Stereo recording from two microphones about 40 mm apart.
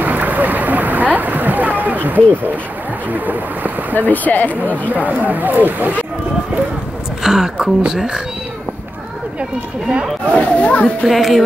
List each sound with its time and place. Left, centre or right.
0.0 s boat: right
3.1 s speech: right
4.1 s speech: left
4.9 s speech: right
7.2 s a woman's voice: centre
9.4 s speech: right
10.3 s speech: left
11.1 s music: centre